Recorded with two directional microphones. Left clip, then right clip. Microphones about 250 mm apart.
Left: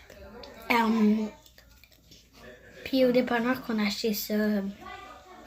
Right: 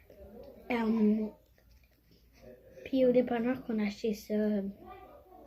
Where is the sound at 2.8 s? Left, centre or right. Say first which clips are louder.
Left 3 dB; centre.